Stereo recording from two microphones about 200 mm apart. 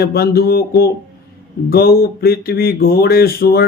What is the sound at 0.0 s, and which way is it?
Speech, 50° left (ahead or behind).